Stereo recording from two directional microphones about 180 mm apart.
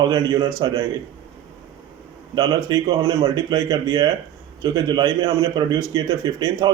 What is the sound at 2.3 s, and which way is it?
A man's voice, 25° right (ahead or behind).